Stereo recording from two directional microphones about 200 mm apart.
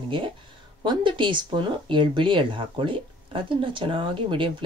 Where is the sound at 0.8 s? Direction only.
25° right (ahead or behind).